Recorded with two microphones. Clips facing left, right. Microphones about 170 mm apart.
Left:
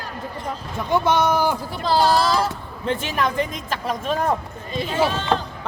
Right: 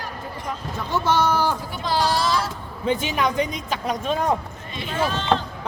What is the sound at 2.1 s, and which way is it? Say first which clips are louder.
Speech: left 4 dB; 35° left (ahead or behind).